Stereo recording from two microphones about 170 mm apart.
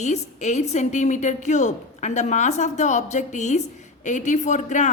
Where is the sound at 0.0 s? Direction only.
40° left (ahead or behind).